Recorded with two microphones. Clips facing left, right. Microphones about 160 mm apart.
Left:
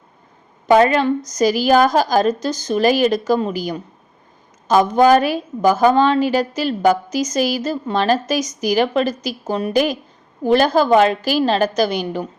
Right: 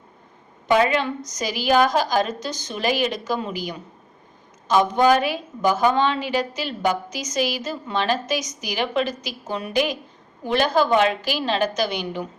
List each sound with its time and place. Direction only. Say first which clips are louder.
0.7 s a woman's voice: left 6 dB; 45° left (ahead or behind)